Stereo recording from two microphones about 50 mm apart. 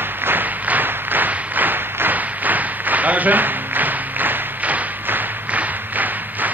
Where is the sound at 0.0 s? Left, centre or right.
Right.